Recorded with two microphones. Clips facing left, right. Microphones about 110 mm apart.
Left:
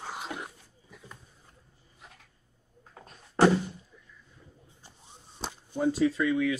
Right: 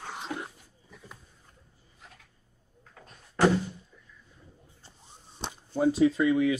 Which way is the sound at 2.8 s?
30° left (ahead or behind).